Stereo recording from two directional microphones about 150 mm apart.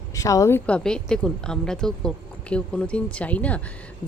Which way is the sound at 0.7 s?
5° left (ahead or behind).